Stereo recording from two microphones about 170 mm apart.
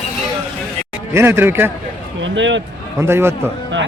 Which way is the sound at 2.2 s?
90° right.